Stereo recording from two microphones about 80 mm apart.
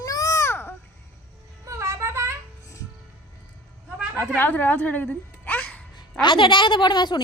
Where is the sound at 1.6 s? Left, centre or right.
Right.